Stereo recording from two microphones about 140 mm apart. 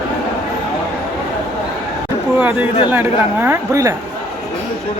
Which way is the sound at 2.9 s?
15° right (ahead or behind).